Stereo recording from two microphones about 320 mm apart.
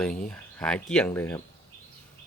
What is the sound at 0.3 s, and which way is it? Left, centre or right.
Speech, centre.